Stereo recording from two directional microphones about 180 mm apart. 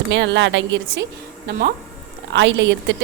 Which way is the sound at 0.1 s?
80° right.